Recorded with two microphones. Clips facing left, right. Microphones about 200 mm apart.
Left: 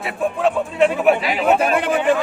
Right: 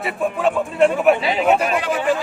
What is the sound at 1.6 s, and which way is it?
Speech, 55° left (ahead or behind).